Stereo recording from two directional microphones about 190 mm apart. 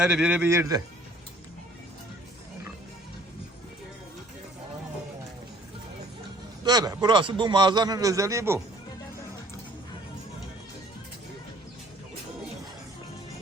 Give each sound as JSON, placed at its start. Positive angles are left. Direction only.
{"t": 0.0, "sound": "a man's voice", "side_deg": -5}
{"t": 6.7, "sound": "a man's voice", "side_deg": -20}